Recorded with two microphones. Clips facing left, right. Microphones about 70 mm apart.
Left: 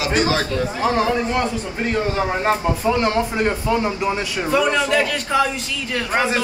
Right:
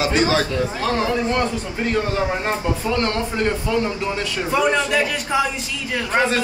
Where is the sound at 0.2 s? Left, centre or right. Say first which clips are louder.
Right 1 dB; right.